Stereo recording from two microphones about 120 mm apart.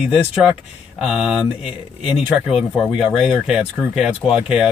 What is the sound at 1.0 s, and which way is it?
Speech, centre (ahead or behind).